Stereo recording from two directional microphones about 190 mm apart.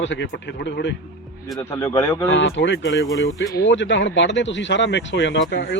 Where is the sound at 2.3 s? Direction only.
75° left (ahead or behind).